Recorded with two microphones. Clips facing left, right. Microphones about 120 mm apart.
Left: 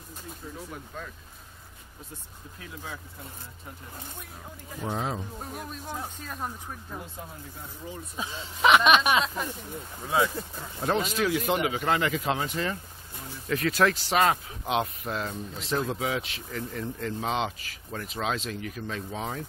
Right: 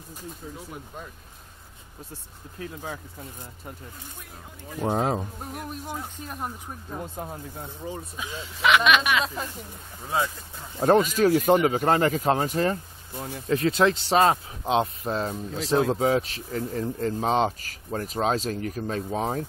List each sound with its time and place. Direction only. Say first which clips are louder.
2.6 s speech: right 6 dB; 45° right (ahead or behind)
4.7 s speech: right 7 dB; 45° right (ahead or behind)
5.4 s speech: right 3 dB; 10° right (ahead or behind)
7.0 s speech: right 6 dB; 45° right (ahead or behind)
8.6 s speech: left 1 dB; 35° left (ahead or behind)
10.8 s speech: right 7 dB; 45° right (ahead or behind)
13.5 s speech: right 3 dB; 25° right (ahead or behind)